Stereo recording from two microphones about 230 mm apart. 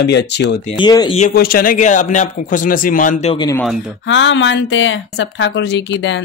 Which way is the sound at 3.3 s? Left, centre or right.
Centre.